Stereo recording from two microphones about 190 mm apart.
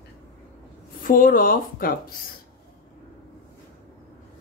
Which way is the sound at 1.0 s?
45° left (ahead or behind).